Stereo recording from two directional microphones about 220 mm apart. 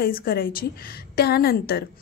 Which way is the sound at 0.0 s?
40° left (ahead or behind).